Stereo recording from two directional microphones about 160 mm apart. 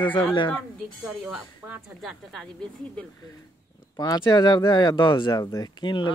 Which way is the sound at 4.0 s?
25° left (ahead or behind).